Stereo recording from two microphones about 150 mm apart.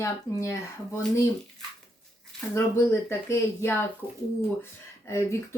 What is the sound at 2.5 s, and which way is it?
Speech, 15° left (ahead or behind).